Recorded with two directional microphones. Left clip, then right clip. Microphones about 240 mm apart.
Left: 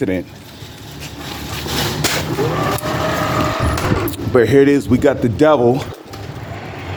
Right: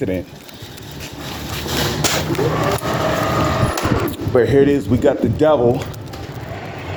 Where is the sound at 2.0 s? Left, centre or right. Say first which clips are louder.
Even; centre.